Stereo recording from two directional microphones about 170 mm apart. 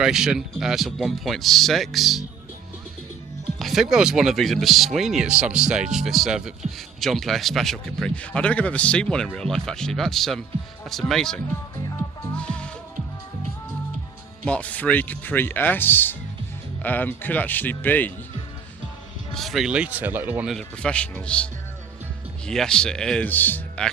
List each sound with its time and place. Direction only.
0.0 s speech: 5° right (ahead or behind)
3.6 s speech: centre (ahead or behind)
12.4 s music: 5° left (ahead or behind)
14.4 s speech: 5° left (ahead or behind)
19.3 s speech: centre (ahead or behind)
20.6 s speech: 5° left (ahead or behind)